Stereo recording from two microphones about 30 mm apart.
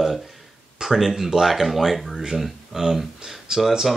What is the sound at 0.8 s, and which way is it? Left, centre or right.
Speech, centre.